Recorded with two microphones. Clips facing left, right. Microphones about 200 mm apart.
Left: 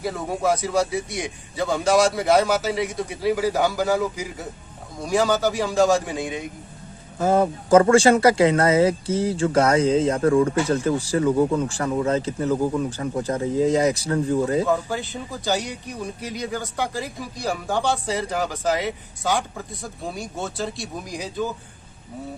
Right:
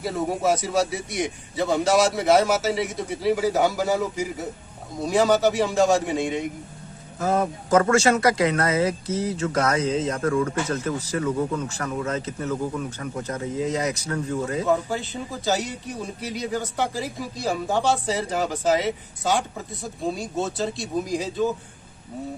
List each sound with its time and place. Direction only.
0.0 s a man's voice: 5° right (ahead or behind)
7.2 s speech: 30° left (ahead or behind)
14.8 s a man's voice: centre (ahead or behind)